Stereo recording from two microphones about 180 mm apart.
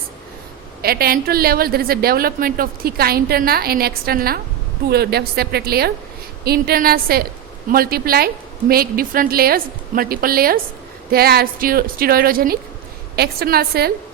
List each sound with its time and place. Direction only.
0.8 s a woman's voice: 55° right (ahead or behind)